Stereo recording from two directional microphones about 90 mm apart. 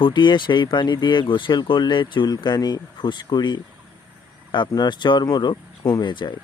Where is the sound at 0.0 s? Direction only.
60° left (ahead or behind).